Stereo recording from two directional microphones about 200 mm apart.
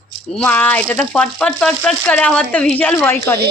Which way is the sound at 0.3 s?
10° left (ahead or behind).